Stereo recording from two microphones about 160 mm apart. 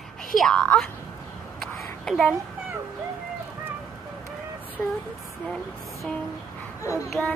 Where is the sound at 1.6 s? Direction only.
Centre (ahead or behind).